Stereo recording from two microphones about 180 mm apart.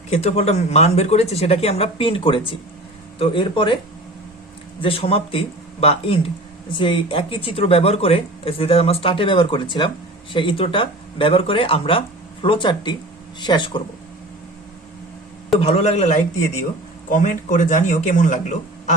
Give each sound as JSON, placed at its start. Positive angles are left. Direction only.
{"t": 0.1, "sound": "speech", "side_deg": 35}
{"t": 4.8, "sound": "speech", "side_deg": 30}
{"t": 15.6, "sound": "speech", "side_deg": 35}